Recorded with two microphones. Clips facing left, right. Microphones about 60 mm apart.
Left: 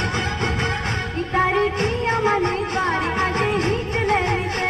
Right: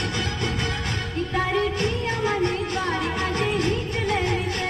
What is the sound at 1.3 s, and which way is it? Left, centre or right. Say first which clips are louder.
Music: left 5 dB; left.